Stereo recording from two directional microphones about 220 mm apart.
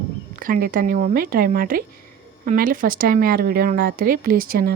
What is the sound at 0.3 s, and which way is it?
Speech, 40° right (ahead or behind).